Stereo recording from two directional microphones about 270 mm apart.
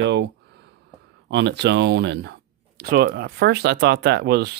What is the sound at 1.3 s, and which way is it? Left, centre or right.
Speech, right.